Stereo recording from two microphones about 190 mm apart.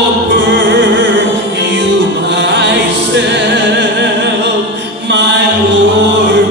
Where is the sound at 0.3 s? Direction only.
70° right (ahead or behind).